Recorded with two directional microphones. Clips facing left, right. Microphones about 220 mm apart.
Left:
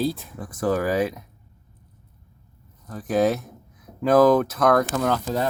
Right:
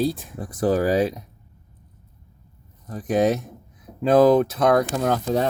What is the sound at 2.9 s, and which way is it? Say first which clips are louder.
Speech: right 1 dB; 20° right (ahead or behind).